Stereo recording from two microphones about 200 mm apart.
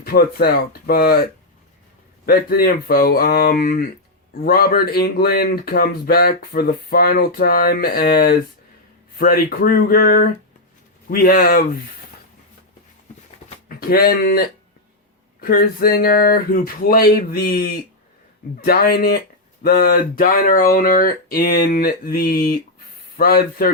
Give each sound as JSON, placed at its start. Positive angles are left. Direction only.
{"t": 0.0, "sound": "speech", "side_deg": 50}
{"t": 2.2, "sound": "speech", "side_deg": 50}
{"t": 13.7, "sound": "speech", "side_deg": 50}